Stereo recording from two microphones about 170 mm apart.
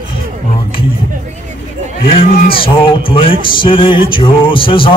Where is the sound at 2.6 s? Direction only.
30° left (ahead or behind).